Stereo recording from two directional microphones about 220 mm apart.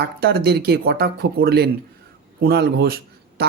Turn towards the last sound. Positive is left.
turn(degrees=-45)  # may be behind; listen again after turning